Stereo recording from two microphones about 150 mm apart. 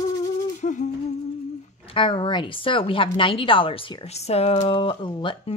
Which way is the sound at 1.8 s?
35° left (ahead or behind).